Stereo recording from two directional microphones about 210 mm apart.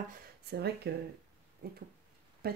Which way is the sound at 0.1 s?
50° right (ahead or behind).